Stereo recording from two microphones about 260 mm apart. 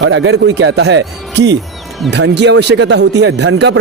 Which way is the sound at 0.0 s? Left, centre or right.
Right.